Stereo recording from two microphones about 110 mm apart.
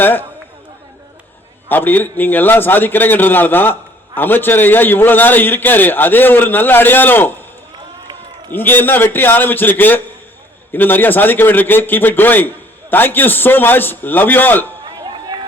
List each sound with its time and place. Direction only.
0.0 s a man's voice: 20° left (ahead or behind)
1.7 s a man's voice: 15° left (ahead or behind)
8.5 s a man's voice: 15° left (ahead or behind)